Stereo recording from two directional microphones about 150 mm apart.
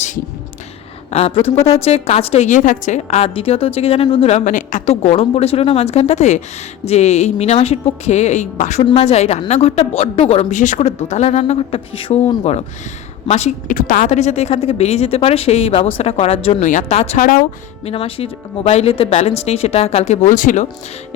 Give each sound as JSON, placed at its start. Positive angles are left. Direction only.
{"t": 1.1, "sound": "a woman's voice", "side_deg": 40}
{"t": 8.8, "sound": "a woman's voice", "side_deg": 40}
{"t": 13.2, "sound": "a woman's voice", "side_deg": 45}
{"t": 13.7, "sound": "a woman's voice", "side_deg": 65}
{"t": 16.6, "sound": "a woman's voice", "side_deg": 50}
{"t": 17.2, "sound": "speech", "side_deg": 65}
{"t": 17.8, "sound": "a woman's voice", "side_deg": 40}